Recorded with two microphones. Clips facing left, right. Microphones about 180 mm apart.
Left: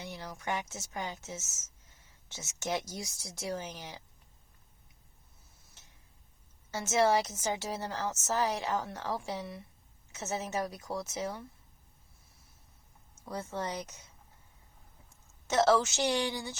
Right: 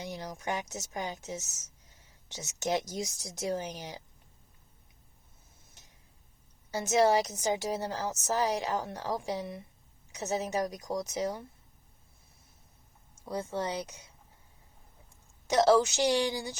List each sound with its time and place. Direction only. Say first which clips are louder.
0.0 s a woman's voice: right 3 dB; 15° right (ahead or behind)
6.7 s a woman's voice: right 2 dB; 15° right (ahead or behind)
13.2 s a woman's voice: right 3 dB; 15° right (ahead or behind)
15.4 s a woman's voice: right 3 dB; 15° right (ahead or behind)